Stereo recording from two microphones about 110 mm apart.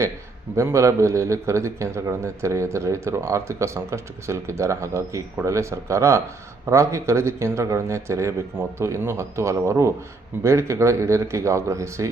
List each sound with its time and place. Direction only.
0.5 s a man's voice: 25° right (ahead or behind)